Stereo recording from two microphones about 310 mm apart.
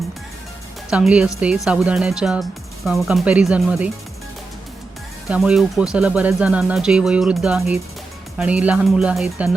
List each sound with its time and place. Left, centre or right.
0.9 s a woman's voice: centre
5.3 s speech: centre